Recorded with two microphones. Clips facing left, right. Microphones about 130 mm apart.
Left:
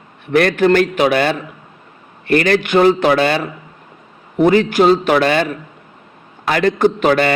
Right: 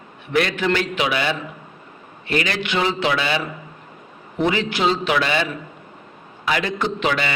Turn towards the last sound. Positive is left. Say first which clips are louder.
# left 9 dB
turn(degrees=50)  # may be behind; listen again after turning